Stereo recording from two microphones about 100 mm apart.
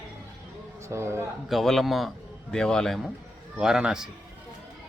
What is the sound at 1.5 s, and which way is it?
A man's voice, centre (ahead or behind).